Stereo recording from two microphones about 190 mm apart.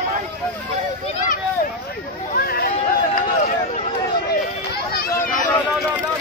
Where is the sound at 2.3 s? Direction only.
50° left (ahead or behind).